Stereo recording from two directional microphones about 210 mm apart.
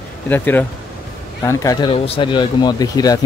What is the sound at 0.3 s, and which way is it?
Speech, 10° left (ahead or behind).